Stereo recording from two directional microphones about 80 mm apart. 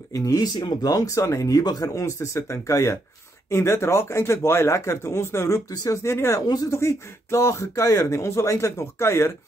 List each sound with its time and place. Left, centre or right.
0.1 s speech: left
0.6 s speech: left
1.6 s speech: left
2.0 s speech: left
6.4 s speech: left
6.7 s speech: left